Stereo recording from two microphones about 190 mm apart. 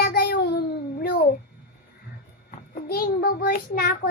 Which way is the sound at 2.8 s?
50° left (ahead or behind).